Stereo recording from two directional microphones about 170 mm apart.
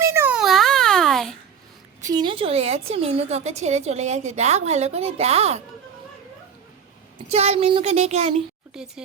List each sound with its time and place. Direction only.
0.0 s babbling: 15° right (ahead or behind); by 1.4 s centre (ahead or behind)
2.0 s a woman's voice: 25° right (ahead or behind)
7.3 s a woman's voice: 35° right (ahead or behind)
8.7 s speech: 5° right (ahead or behind)